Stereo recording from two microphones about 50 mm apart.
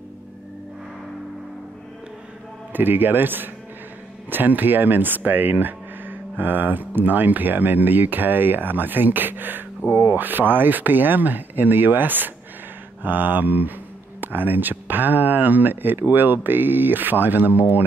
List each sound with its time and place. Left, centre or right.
2.7 s speech: right